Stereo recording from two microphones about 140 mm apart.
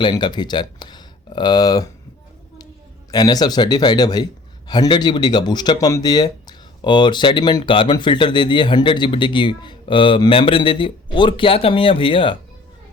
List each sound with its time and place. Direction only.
0.0 s speech: 30° left (ahead or behind)
3.1 s a man's voice: 30° left (ahead or behind)